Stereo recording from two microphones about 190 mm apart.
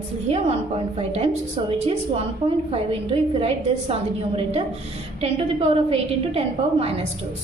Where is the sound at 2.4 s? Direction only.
30° right (ahead or behind).